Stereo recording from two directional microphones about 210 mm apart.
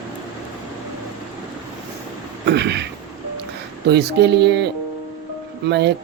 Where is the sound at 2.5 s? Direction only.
55° right (ahead or behind).